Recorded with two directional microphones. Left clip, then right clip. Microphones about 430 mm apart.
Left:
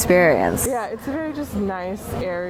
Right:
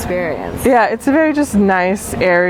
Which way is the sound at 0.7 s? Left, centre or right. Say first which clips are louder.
Right 13 dB; right.